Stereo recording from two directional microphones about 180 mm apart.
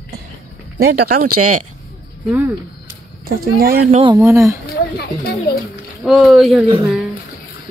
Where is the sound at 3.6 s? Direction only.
55° right (ahead or behind).